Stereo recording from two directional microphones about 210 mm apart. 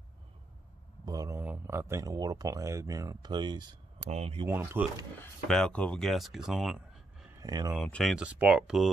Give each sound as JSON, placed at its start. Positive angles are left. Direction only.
{"t": 1.0, "sound": "speech", "side_deg": -15}
{"t": 4.5, "sound": "speech", "side_deg": -10}
{"t": 5.2, "sound": "speech", "side_deg": 5}
{"t": 7.3, "sound": "speech", "side_deg": -15}
{"t": 7.7, "sound": "speech", "side_deg": 0}